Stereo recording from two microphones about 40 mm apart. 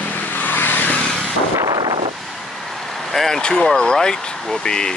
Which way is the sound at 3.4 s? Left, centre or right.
Left.